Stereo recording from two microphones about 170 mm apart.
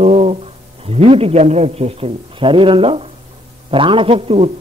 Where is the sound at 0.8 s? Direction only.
35° right (ahead or behind).